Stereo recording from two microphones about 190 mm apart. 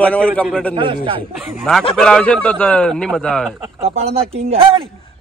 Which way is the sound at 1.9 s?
5° left (ahead or behind).